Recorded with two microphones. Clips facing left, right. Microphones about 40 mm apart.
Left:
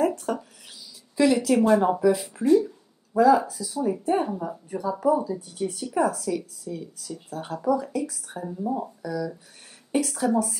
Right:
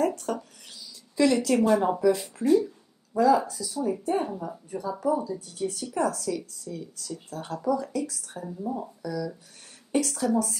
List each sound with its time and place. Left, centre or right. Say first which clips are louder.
0.0 s a woman's voice: left 2 dB; centre